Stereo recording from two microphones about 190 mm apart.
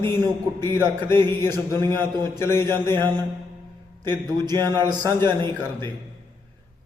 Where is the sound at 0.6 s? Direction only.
10° left (ahead or behind).